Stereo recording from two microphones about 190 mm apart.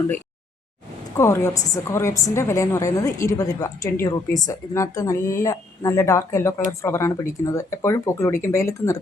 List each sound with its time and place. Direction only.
1.1 s a woman's voice: 15° left (ahead or behind)